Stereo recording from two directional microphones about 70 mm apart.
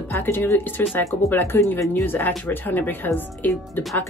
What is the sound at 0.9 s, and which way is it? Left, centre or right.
Speech, left.